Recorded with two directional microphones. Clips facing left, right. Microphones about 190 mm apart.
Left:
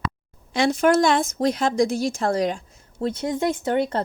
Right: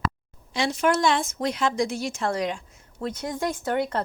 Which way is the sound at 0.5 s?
50° left (ahead or behind).